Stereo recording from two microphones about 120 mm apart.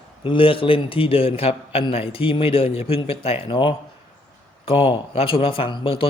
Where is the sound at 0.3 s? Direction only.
45° left (ahead or behind).